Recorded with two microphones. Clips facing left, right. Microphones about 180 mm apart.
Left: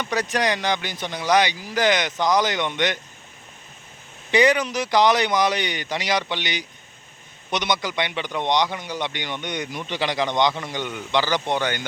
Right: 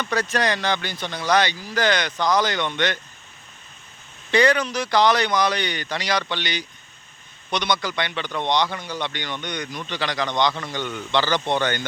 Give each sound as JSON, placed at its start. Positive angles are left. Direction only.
{"t": 0.0, "sound": "speech", "side_deg": 15}
{"t": 4.3, "sound": "speech", "side_deg": 15}